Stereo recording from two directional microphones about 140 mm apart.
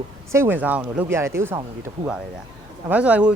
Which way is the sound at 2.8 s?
10° right (ahead or behind).